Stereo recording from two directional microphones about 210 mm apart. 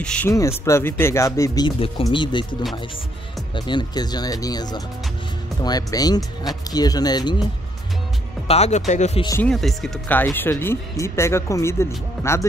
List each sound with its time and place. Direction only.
0.0 s speech: 5° left (ahead or behind); by 2.4 s 20° left (ahead or behind)
3.5 s speech: 20° left (ahead or behind)
8.5 s speech: 30° left (ahead or behind)
9.4 s speech: centre (ahead or behind)